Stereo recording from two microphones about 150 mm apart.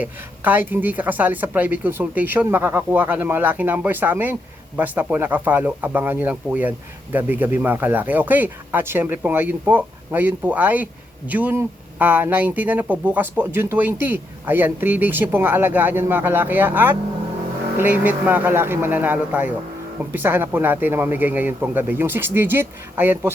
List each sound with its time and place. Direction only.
0.0 s speech: 10° right (ahead or behind)